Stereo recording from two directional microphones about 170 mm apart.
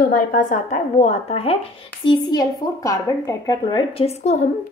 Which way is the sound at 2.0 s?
25° left (ahead or behind).